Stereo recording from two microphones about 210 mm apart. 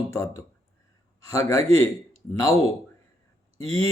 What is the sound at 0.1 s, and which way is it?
Speech, 15° left (ahead or behind).